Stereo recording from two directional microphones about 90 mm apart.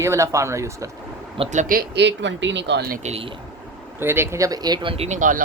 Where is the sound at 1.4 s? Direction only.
90° right.